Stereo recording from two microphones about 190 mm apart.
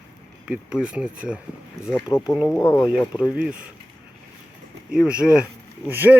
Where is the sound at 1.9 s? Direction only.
10° left (ahead or behind).